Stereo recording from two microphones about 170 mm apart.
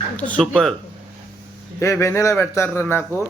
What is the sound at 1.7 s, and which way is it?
Speech, 15° left (ahead or behind).